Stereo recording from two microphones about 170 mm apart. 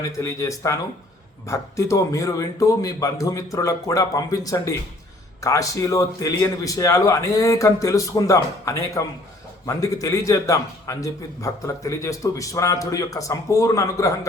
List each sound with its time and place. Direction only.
0.0 s a man's voice: 20° left (ahead or behind)